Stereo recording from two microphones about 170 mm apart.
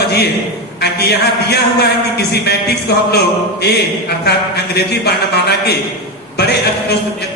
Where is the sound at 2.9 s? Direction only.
75° left (ahead or behind).